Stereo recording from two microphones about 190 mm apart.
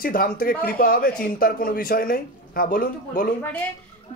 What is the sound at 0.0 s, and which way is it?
Speech, 50° left (ahead or behind).